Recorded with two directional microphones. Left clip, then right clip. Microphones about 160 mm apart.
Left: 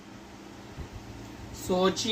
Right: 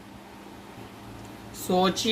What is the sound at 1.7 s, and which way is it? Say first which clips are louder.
Speech: right 2 dB; 50° right (ahead or behind).